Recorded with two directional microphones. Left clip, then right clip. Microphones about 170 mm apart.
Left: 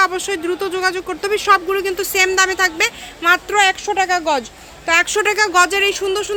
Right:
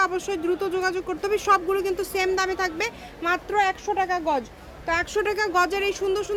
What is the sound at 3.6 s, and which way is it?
A woman's voice, 25° left (ahead or behind).